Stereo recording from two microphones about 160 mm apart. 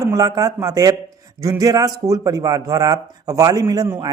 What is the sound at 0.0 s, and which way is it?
A man's voice, 20° right (ahead or behind).